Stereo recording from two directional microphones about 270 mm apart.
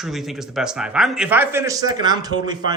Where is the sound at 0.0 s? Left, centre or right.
Centre.